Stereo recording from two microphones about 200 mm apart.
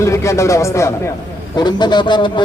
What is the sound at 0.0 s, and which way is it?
A man's voice, 15° left (ahead or behind).